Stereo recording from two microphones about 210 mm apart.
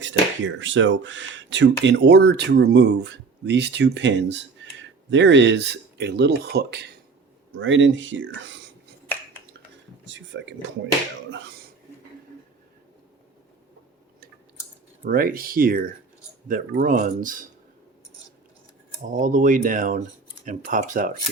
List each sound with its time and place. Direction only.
0.0 s speech: 60° right (ahead or behind)
7.5 s speech: 60° right (ahead or behind)
10.1 s a sound: 60° right (ahead or behind)
15.0 s speech: 45° right (ahead or behind)
19.1 s speech: 40° right (ahead or behind)